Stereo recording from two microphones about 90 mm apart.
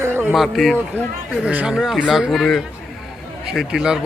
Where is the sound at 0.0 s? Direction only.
25° right (ahead or behind).